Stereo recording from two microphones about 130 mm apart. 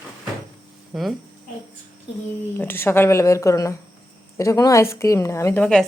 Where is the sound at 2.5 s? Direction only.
15° left (ahead or behind).